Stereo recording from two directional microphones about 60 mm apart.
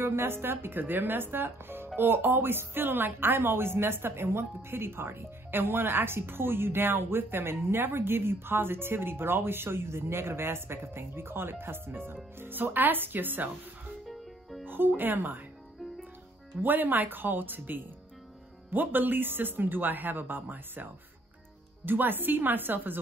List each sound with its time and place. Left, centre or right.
0.0 s speech: right
14.7 s speech: right
16.6 s speech: right